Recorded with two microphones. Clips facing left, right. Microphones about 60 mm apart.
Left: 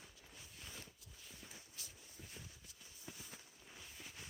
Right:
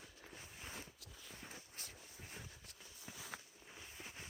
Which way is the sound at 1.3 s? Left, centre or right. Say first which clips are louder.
Right 4 dB; right.